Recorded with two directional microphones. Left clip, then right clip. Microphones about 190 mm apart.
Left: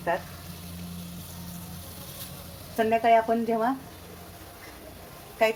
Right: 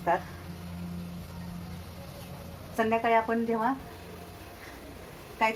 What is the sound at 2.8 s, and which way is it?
Speech, 35° left (ahead or behind).